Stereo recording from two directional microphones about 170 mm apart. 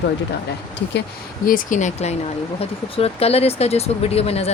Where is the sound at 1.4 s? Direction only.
55° left (ahead or behind); by 4.5 s 35° left (ahead or behind).